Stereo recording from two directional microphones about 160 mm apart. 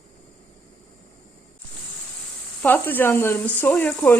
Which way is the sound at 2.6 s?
10° left (ahead or behind).